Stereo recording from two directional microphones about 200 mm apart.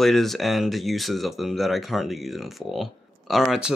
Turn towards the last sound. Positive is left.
turn(degrees=0)  # may be behind; listen again after turning